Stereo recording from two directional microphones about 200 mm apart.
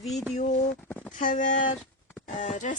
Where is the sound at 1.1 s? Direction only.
40° left (ahead or behind).